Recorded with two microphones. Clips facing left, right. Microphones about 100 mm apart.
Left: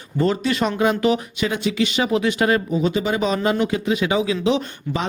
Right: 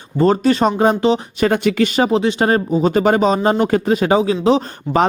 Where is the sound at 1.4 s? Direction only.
50° right (ahead or behind).